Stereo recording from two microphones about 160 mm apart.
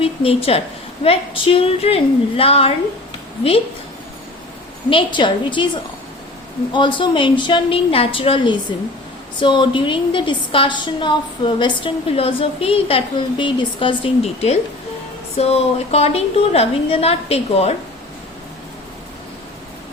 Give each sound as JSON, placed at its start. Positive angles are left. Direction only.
{"t": 0.0, "sound": "a woman's voice", "side_deg": 35}
{"t": 4.9, "sound": "a woman's voice", "side_deg": 30}